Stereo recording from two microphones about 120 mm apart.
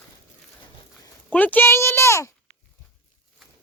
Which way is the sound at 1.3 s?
15° left (ahead or behind).